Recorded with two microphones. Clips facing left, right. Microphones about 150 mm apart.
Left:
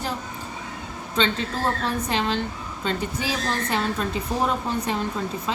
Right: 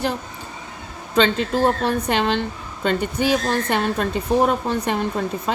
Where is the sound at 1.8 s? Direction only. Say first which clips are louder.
Right 5 dB; 65° right (ahead or behind).